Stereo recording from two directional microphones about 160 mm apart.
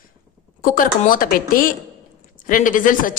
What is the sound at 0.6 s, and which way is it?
Speech, 60° left (ahead or behind).